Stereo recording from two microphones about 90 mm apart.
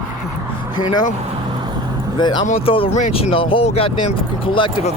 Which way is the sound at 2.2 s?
55° left (ahead or behind).